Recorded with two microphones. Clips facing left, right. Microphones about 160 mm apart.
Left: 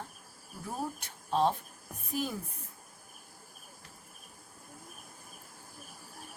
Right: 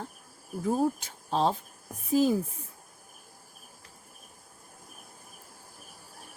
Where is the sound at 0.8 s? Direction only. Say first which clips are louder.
Right 10 dB; 90° right.